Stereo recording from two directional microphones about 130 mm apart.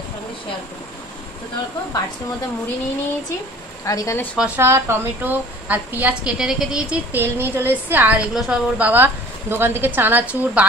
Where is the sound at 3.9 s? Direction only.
25° left (ahead or behind).